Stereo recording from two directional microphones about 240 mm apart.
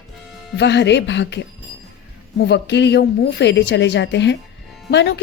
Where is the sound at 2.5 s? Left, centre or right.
Left.